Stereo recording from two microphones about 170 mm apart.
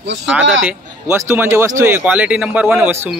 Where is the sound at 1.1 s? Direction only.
15° right (ahead or behind).